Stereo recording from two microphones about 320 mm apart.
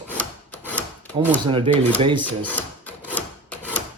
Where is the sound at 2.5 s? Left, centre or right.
Centre.